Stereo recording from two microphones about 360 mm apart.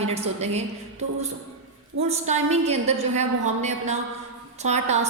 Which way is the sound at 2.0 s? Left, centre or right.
Centre.